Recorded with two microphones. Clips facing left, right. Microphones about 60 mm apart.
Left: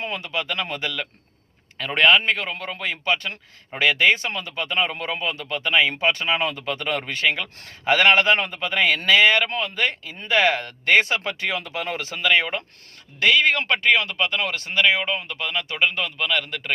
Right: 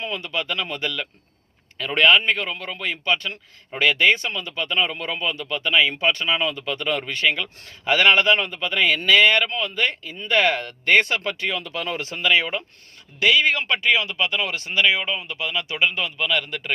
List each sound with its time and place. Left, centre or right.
0.0 s a man's voice: left
10.8 s speech: centre
11.3 s a man's voice: left
12.3 s speech: left